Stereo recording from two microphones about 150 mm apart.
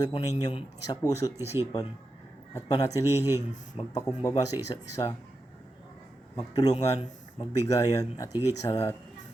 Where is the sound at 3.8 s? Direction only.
25° left (ahead or behind).